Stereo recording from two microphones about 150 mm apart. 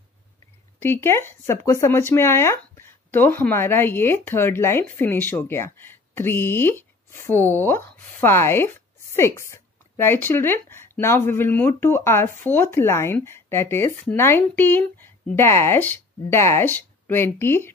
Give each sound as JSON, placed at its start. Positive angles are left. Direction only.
{"t": 0.7, "sound": "speech", "side_deg": 15}